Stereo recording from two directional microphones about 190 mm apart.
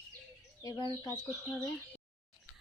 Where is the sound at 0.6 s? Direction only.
20° left (ahead or behind).